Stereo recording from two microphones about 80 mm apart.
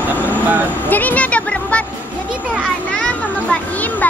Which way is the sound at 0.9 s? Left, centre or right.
Left.